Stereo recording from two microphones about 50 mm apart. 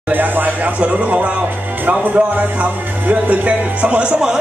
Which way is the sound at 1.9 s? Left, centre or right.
Right.